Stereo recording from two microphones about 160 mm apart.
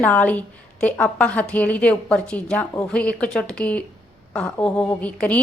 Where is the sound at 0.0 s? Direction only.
10° left (ahead or behind).